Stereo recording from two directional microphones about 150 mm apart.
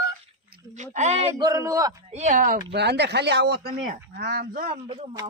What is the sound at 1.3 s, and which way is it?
Speech, 20° right (ahead or behind).